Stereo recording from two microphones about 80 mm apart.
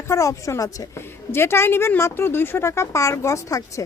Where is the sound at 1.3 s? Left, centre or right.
Left.